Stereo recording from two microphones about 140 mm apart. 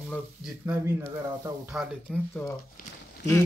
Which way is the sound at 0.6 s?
15° right (ahead or behind).